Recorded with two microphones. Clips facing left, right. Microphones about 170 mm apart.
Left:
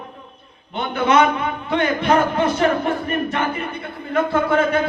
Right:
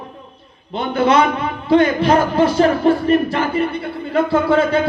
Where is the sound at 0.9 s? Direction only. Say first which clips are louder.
Right 2 dB; 30° right (ahead or behind).